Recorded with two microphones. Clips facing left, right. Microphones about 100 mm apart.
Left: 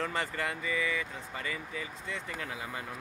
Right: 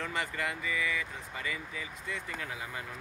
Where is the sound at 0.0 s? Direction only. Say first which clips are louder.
Left 1 dB; 35° left (ahead or behind).